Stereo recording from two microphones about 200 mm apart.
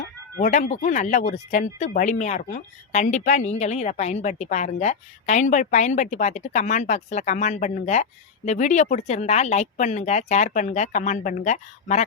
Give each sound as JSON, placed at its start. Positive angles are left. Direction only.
{"t": 0.5, "sound": "speech", "side_deg": 35}